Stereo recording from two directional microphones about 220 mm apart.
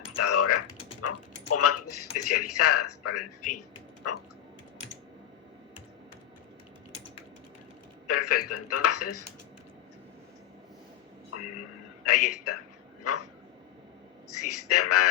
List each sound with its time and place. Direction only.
0.2 s typing: 90° left
4.0 s a man's voice: 90° left
8.0 s a man's voice: 90° left
12.0 s a man's voice: 90° left
14.3 s a sound: 90° left